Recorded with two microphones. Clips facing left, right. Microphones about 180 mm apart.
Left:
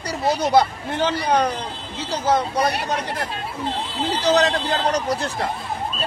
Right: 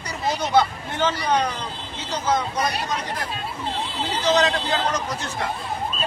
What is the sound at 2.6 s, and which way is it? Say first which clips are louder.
Speech: left 3 dB; 60° left (ahead or behind).